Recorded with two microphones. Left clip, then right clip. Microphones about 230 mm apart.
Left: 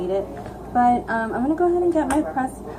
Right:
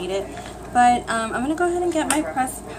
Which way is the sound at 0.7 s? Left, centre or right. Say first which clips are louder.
Right 2 dB; centre.